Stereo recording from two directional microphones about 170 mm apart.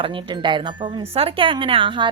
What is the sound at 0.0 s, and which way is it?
Speech, 30° right (ahead or behind).